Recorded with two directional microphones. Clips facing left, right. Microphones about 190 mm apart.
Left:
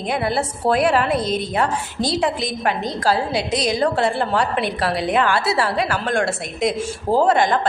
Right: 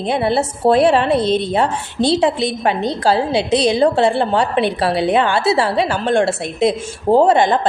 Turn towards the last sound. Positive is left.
turn(degrees=-25)  # may be behind; listen again after turning